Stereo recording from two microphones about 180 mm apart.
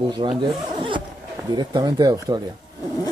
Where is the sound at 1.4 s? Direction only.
25° right (ahead or behind).